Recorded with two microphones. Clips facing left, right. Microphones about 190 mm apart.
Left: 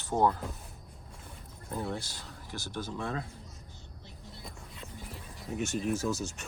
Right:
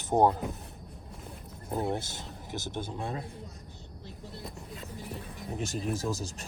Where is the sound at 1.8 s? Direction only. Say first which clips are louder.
Right 5 dB; 20° right (ahead or behind).